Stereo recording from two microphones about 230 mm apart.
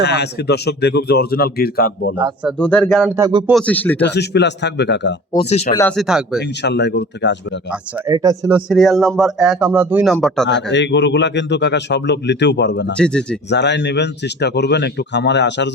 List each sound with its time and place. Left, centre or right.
0.0 s a man's voice: left
2.6 s speech: centre
3.2 s speech: centre
3.5 s speech: centre
4.0 s a man's voice: left
5.3 s speech: left
6.0 s speech: centre
6.6 s a man's voice: left
7.7 s speech: centre
8.7 s speech: centre
10.4 s a man's voice: left